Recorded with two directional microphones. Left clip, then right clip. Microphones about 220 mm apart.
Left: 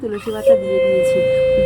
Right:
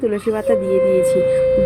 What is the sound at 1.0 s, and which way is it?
Speech, 20° left (ahead or behind).